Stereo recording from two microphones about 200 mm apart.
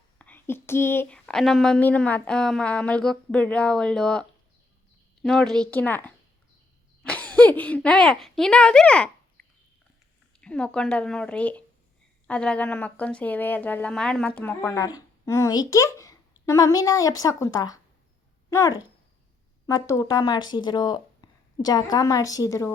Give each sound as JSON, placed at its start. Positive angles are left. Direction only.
{"t": 0.2, "sound": "speech", "side_deg": 10}
{"t": 10.4, "sound": "speech", "side_deg": 5}
{"t": 19.6, "sound": "speech", "side_deg": 15}